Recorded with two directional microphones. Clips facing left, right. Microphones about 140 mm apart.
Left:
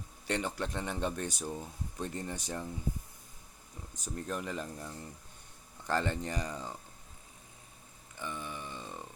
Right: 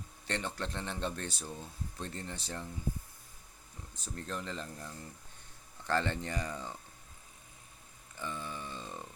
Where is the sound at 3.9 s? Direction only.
15° left (ahead or behind).